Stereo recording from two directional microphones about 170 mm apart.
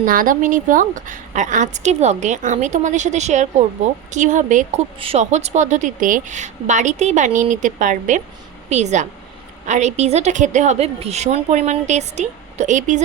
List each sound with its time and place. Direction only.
0.0 s a woman's voice: 55° right (ahead or behind)
4.9 s a woman's voice: 35° right (ahead or behind)